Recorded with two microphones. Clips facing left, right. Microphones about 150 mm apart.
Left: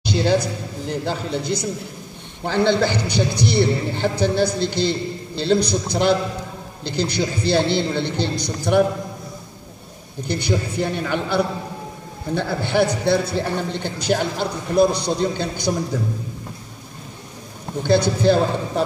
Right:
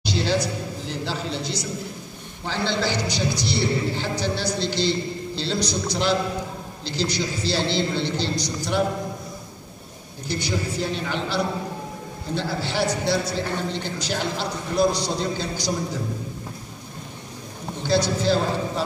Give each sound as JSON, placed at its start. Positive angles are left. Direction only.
{"t": 0.0, "sound": "a man's voice", "side_deg": 55}
{"t": 10.2, "sound": "a man's voice", "side_deg": 60}
{"t": 17.8, "sound": "a man's voice", "side_deg": 55}